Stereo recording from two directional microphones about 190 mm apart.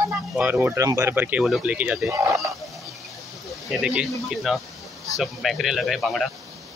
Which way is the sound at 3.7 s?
5° right (ahead or behind).